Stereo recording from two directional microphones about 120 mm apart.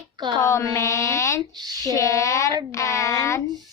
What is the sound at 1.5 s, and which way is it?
Speech, 35° right (ahead or behind).